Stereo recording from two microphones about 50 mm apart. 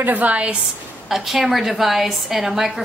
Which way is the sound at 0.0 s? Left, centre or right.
Right.